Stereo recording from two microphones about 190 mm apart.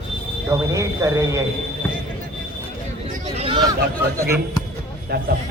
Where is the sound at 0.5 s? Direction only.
15° right (ahead or behind).